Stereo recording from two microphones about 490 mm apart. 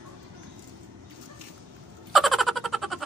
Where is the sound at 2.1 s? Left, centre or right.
Centre.